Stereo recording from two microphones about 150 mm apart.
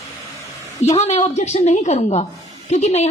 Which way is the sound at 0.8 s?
45° left (ahead or behind).